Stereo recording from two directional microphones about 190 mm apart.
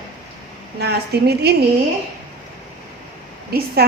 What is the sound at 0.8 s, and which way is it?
Speech, 60° right (ahead or behind).